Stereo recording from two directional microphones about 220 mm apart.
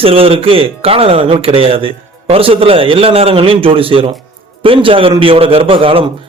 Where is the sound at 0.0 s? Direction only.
25° right (ahead or behind).